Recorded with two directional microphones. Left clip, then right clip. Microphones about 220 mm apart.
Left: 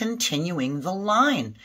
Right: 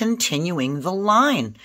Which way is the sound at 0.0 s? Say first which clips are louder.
Right 4 dB; 50° right (ahead or behind).